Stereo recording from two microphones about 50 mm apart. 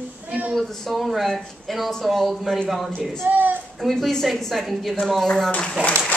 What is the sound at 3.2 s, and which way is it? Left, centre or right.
Speech, right.